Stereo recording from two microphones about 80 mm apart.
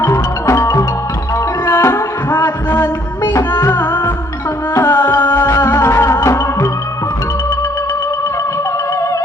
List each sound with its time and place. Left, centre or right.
0.0 s music: left